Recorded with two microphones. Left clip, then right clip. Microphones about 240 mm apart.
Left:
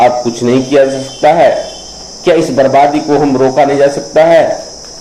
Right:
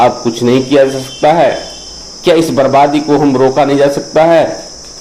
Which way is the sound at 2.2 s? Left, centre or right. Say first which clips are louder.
Even; right.